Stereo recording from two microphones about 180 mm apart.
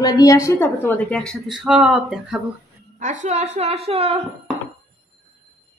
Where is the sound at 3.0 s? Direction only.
45° right (ahead or behind).